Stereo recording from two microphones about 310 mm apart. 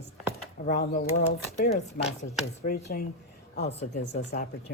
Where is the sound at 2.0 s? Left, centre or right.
Left.